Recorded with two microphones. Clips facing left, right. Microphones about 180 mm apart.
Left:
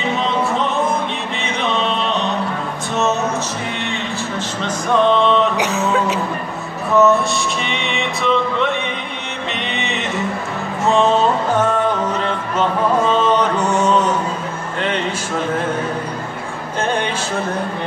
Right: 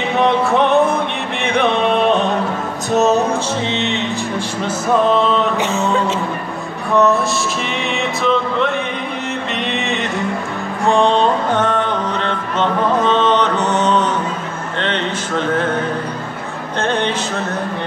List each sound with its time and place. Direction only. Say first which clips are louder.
0.1 s music: right 6 dB; 60° right (ahead or behind)
2.9 s music: right 5 dB; 35° right (ahead or behind)
4.6 s music: even; 5° right (ahead or behind)
14.8 s a sound: even; 10° left (ahead or behind)
16.8 s music: right 2 dB; 10° left (ahead or behind)